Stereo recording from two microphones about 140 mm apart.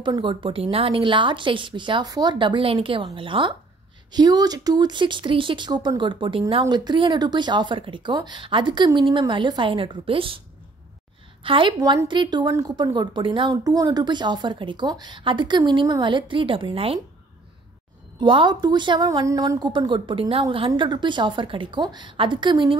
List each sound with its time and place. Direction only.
0.0 s a woman's voice: 35° right (ahead or behind)
11.4 s a woman's voice: 35° right (ahead or behind)
13.5 s a woman's voice: 25° right (ahead or behind); by 17.0 s 40° right (ahead or behind)
18.2 s a woman's voice: 35° right (ahead or behind)